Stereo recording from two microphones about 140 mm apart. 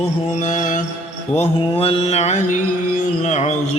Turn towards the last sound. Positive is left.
turn(degrees=55)  # may be behind; listen again after turning